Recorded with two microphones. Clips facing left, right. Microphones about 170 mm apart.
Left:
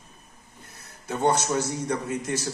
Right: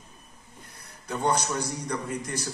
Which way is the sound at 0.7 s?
25° left (ahead or behind).